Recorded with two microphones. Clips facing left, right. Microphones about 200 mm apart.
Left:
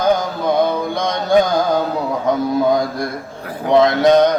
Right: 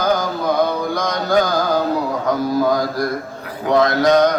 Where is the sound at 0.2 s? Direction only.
25° left (ahead or behind).